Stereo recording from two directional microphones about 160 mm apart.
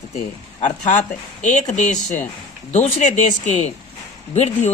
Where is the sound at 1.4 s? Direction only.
50° left (ahead or behind).